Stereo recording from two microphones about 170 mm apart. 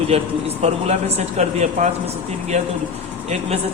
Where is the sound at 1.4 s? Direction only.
40° right (ahead or behind).